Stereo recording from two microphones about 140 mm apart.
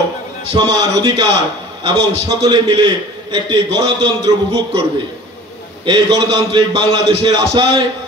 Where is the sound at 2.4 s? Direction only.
30° right (ahead or behind).